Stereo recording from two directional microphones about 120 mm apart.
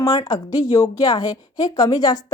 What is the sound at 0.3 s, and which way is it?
A woman's voice, 25° left (ahead or behind).